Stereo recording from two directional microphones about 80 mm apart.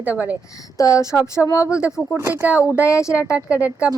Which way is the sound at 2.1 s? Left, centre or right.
Right.